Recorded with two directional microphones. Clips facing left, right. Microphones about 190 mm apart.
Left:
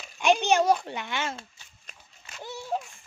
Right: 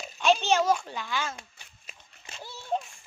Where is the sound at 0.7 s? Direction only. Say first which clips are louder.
Left 1 dB; 20° left (ahead or behind).